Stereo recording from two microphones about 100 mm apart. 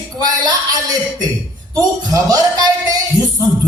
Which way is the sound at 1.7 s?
40° right (ahead or behind).